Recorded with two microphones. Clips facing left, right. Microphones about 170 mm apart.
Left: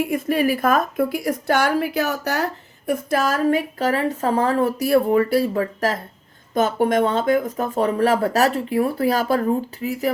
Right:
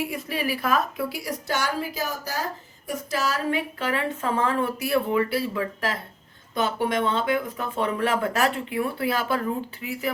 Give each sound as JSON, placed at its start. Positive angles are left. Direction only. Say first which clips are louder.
{"t": 0.0, "sound": "a woman's voice", "louder": "left 8 dB", "side_deg": 50}